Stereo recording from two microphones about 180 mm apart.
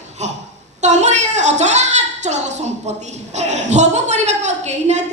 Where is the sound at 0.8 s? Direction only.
40° right (ahead or behind).